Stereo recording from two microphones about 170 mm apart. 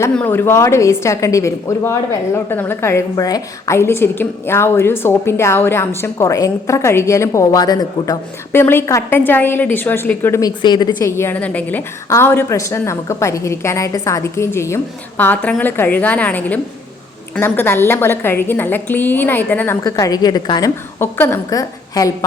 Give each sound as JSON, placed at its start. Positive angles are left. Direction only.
{"t": 0.0, "sound": "a woman's voice", "side_deg": 10}
{"t": 10.6, "sound": "a woman's voice", "side_deg": 25}